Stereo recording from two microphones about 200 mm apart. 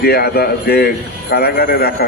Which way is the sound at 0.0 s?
50° left (ahead or behind).